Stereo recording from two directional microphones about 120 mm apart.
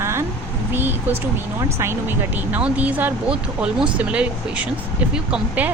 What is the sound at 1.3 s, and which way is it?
Speech, 20° right (ahead or behind).